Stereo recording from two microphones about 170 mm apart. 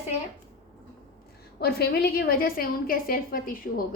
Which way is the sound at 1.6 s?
65° left (ahead or behind).